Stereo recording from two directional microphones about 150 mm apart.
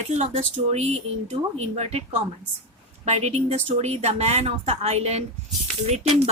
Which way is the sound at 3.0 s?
45° right (ahead or behind).